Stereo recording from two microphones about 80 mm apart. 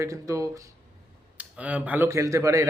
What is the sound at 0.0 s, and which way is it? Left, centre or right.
Speech, right.